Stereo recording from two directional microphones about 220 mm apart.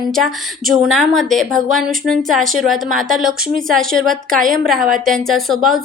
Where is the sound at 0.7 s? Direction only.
Centre (ahead or behind).